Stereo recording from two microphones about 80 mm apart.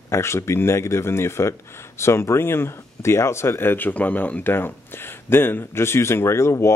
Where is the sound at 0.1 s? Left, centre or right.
Left.